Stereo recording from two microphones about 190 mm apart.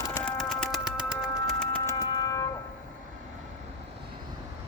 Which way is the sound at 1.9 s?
20° left (ahead or behind).